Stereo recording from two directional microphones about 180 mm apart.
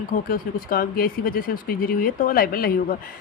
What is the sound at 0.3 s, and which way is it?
Speech, 55° left (ahead or behind).